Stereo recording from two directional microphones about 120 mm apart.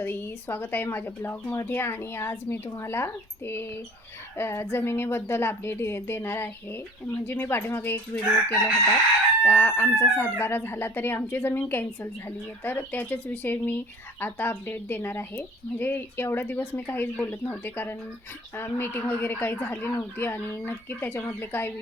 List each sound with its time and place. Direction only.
0.0 s speech: 15° left (ahead or behind)